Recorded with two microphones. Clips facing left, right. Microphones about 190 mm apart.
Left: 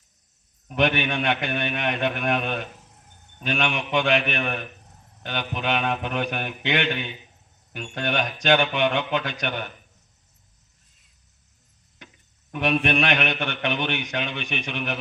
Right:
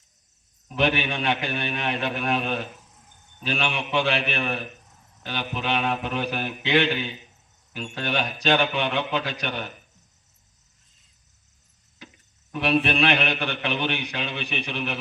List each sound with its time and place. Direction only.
0.8 s a man's voice: 35° right (ahead or behind)
12.5 s a man's voice: 35° right (ahead or behind)